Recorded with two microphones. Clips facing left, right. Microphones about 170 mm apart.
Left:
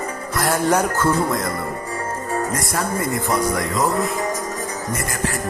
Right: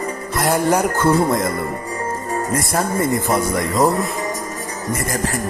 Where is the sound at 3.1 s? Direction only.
20° right (ahead or behind).